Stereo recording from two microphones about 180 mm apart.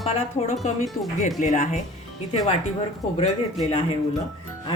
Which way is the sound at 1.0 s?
50° left (ahead or behind).